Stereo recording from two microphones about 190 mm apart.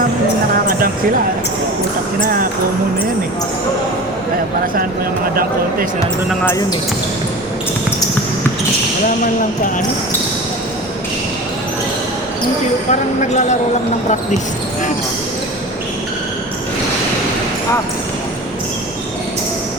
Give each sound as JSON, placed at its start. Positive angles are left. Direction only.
{"t": 4.7, "sound": "speech", "side_deg": -50}
{"t": 6.4, "sound": "speech", "side_deg": 10}
{"t": 12.9, "sound": "speech", "side_deg": 40}